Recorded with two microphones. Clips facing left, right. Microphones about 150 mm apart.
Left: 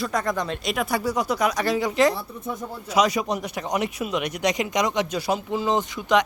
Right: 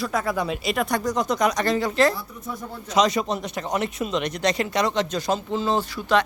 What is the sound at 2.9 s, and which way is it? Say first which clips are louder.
Speech: right 1 dB; 10° left (ahead or behind).